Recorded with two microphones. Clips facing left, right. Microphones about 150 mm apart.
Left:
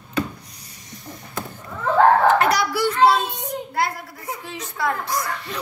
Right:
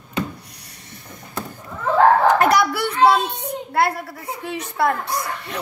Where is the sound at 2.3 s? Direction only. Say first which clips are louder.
Right 2 dB; 55° right (ahead or behind).